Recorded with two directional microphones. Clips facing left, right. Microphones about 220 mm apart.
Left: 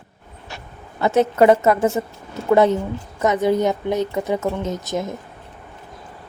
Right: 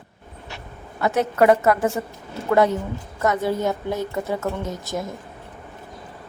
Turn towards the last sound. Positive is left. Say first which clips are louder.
# left 4 dB
turn(degrees=20)  # may be behind; listen again after turning